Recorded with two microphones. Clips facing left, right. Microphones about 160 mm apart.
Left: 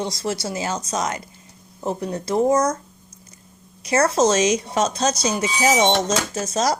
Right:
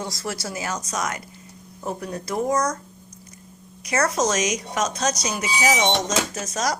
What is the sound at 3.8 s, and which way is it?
Speech, 30° left (ahead or behind).